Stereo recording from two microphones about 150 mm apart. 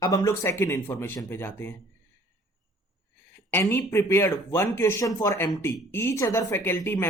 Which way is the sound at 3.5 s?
15° left (ahead or behind).